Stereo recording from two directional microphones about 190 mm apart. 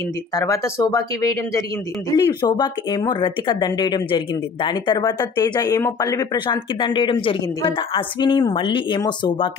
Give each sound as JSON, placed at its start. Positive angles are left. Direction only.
{"t": 0.3, "sound": "speech", "side_deg": 20}